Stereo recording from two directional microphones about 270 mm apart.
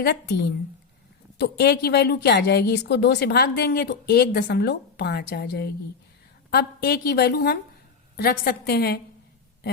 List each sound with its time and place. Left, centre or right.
0.0 s a woman's voice: left